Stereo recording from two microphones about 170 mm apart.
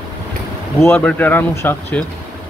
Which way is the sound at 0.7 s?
10° left (ahead or behind).